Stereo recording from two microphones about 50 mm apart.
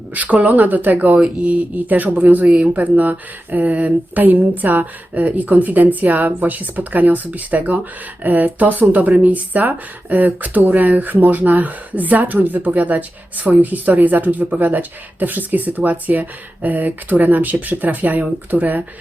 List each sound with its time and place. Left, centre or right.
0.1 s speech: right